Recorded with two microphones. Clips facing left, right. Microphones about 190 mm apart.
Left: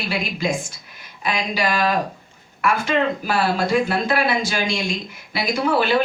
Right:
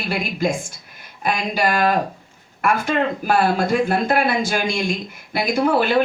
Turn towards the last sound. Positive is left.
turn(degrees=-50)  # may be behind; listen again after turning